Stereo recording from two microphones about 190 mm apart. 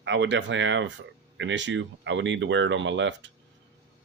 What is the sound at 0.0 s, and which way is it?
Speech, 75° right (ahead or behind).